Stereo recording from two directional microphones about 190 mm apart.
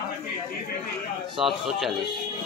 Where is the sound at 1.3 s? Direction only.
Centre (ahead or behind).